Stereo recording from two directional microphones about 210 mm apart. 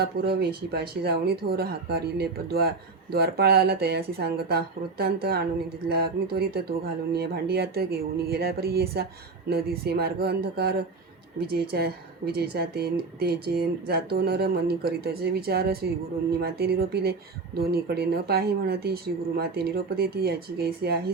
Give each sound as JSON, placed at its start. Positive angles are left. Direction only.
{"t": 0.0, "sound": "speech", "side_deg": -50}